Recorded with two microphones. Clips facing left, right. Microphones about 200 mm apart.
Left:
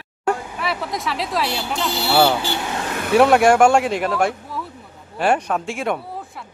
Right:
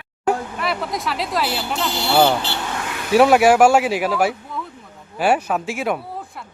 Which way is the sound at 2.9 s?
50° left (ahead or behind).